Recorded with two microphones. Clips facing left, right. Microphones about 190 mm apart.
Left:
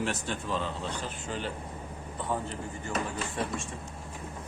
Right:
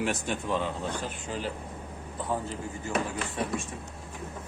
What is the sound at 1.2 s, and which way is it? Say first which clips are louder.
Speech: right 1 dB; centre (ahead or behind).